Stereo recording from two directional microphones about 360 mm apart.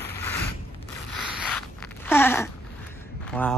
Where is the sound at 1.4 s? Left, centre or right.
Centre.